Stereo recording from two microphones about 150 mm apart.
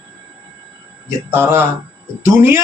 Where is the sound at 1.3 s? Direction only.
15° right (ahead or behind).